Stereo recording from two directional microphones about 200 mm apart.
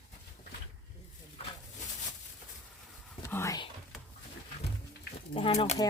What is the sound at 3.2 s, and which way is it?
Speech, 15° left (ahead or behind).